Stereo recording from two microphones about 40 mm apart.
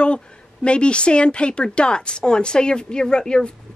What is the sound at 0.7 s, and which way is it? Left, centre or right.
A woman's voice, left.